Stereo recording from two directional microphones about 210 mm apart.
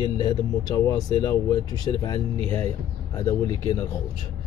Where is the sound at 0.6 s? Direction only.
20° left (ahead or behind).